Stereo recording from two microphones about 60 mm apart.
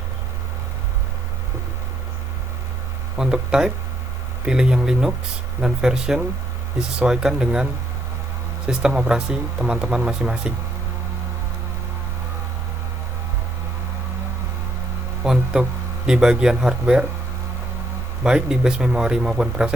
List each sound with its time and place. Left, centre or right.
3.2 s speech: centre
15.2 s a sound: centre
16.0 s speech: centre
18.2 s speech: centre